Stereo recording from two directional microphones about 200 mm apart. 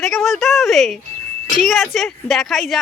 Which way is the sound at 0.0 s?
Centre (ahead or behind).